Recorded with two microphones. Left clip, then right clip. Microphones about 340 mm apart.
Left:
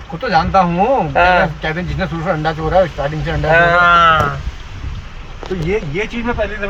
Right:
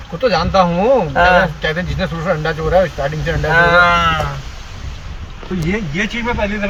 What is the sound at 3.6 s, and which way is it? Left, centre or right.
Speech, centre.